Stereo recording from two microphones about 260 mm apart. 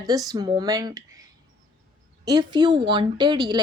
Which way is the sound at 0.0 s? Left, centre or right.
Centre.